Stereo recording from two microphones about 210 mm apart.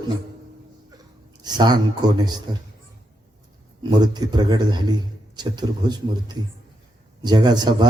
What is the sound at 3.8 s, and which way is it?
A man's voice, 20° right (ahead or behind).